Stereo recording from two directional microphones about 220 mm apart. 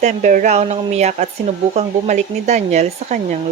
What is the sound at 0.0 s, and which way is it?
Speech, 35° right (ahead or behind).